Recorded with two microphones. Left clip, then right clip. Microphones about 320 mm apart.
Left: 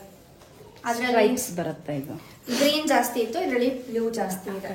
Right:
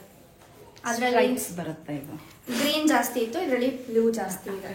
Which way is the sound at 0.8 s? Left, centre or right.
Centre.